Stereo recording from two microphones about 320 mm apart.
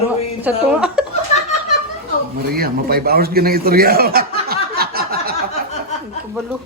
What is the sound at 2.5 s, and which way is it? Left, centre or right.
Speech, right.